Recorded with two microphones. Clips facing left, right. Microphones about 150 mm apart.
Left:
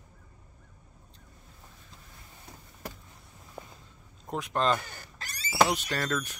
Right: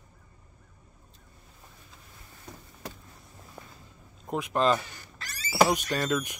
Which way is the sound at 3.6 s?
15° left (ahead or behind).